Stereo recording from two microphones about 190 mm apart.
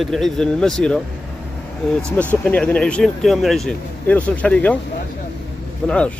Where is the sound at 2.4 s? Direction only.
10° left (ahead or behind).